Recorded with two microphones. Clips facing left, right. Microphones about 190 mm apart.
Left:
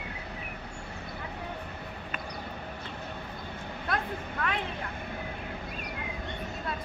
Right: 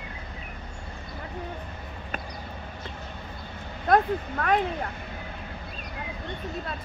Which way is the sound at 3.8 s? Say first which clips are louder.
Right 12 dB; 45° right (ahead or behind).